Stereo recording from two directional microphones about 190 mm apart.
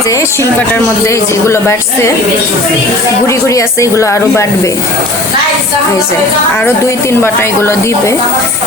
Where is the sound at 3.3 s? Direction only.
15° left (ahead or behind).